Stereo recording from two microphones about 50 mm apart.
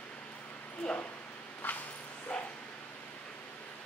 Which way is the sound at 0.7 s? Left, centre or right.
Left.